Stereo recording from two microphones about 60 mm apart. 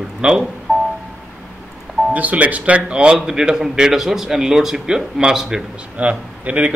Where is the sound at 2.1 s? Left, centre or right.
Right.